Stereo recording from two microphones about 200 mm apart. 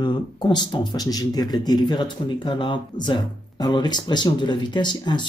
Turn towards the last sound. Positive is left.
turn(degrees=20)  # may be behind; listen again after turning